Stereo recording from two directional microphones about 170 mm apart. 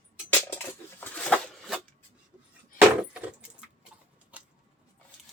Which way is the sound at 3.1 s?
5° right (ahead or behind).